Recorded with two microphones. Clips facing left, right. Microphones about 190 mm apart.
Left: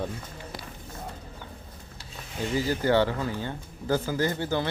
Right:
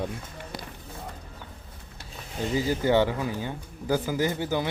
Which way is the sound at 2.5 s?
15° right (ahead or behind).